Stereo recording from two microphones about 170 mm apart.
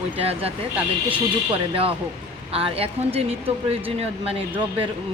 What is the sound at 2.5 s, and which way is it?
Speech, 35° right (ahead or behind).